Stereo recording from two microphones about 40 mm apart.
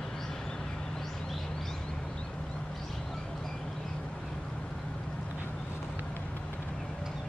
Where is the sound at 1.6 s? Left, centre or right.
Centre.